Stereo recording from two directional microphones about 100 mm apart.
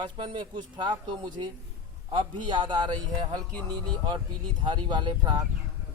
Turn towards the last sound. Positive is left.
turn(degrees=-50)  # may be behind; listen again after turning